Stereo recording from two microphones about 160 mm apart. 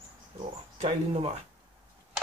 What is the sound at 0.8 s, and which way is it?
Speech, 45° right (ahead or behind).